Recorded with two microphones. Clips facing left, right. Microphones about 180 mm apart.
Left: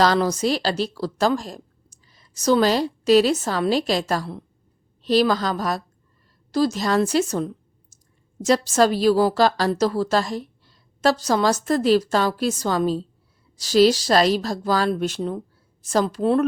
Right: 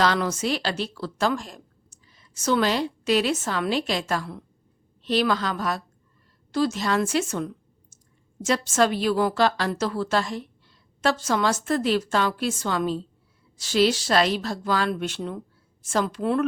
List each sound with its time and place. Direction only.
0.0 s a woman's voice: 35° left (ahead or behind)